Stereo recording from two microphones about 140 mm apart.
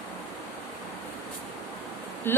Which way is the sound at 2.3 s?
15° left (ahead or behind).